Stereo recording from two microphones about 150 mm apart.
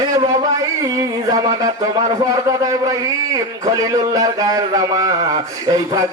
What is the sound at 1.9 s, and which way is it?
Speech, 25° right (ahead or behind).